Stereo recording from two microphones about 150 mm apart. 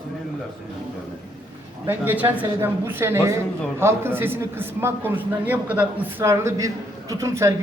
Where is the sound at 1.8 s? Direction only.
10° right (ahead or behind).